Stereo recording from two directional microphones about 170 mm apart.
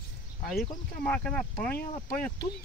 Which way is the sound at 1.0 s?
5° left (ahead or behind).